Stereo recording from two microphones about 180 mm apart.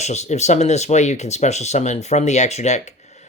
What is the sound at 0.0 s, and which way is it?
Speech, 40° left (ahead or behind).